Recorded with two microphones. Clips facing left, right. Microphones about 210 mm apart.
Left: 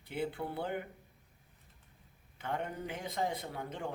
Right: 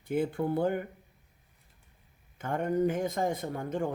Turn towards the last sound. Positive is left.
turn(degrees=-45)  # may be behind; listen again after turning